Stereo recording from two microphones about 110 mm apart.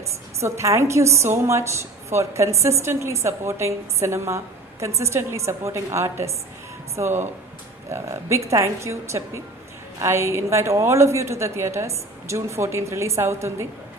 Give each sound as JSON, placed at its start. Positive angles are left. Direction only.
{"t": 0.0, "sound": "a woman's voice", "side_deg": -25}